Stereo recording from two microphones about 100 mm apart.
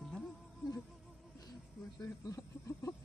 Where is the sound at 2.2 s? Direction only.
30° left (ahead or behind).